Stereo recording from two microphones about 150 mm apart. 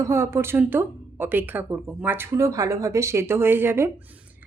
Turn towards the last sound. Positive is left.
turn(degrees=-15)  # may be behind; listen again after turning